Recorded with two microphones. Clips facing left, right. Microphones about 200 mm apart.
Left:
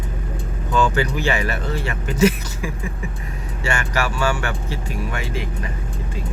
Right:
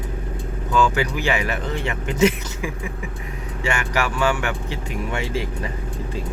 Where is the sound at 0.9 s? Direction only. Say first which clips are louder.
Left 1 dB; 10° right (ahead or behind); by 5.4 s 30° right (ahead or behind).